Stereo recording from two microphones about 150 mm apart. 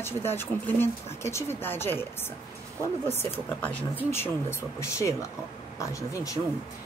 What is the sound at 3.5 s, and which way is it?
A woman's voice, 10° left (ahead or behind).